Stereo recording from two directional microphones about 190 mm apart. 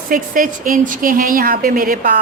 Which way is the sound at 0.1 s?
45° right (ahead or behind).